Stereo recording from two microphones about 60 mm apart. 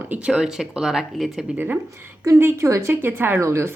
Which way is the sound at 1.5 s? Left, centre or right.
Right.